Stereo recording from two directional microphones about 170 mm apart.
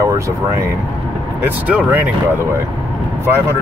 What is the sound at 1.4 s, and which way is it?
Speech, 10° right (ahead or behind).